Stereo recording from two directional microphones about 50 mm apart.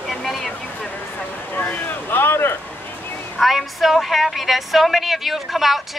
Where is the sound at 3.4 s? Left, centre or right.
Centre.